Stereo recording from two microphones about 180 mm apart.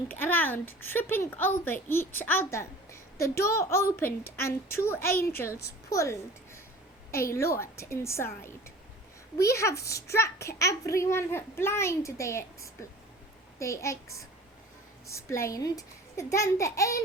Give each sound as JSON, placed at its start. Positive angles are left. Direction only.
{"t": 0.1, "sound": "a child's voice", "side_deg": 10}